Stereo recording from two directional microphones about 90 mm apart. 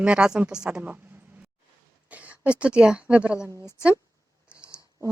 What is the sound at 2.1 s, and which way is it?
Speech, 15° right (ahead or behind).